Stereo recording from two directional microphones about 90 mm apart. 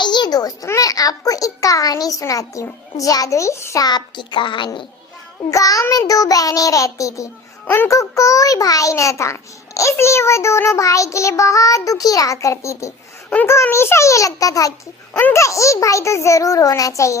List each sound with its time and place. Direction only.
0.0 s a sound: 55° left (ahead or behind)
0.7 s a child's voice: 40° left (ahead or behind)
3.8 s a child's voice: 55° left (ahead or behind)
5.5 s a child's voice: 40° left (ahead or behind)